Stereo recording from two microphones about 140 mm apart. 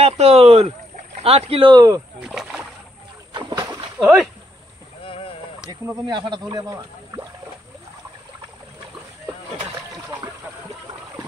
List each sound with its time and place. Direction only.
0.0 s speech: 45° right (ahead or behind); by 2.0 s 30° right (ahead or behind)
2.2 s speech: 5° right (ahead or behind)
3.3 s a sound: 30° right (ahead or behind)
4.0 s speech: 5° right (ahead or behind)
5.0 s a sound: 40° left (ahead or behind)
5.7 s speech: 30° right (ahead or behind)